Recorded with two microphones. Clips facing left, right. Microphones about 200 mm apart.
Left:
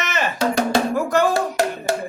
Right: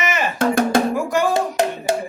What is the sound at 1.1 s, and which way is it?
Music, 15° right (ahead or behind).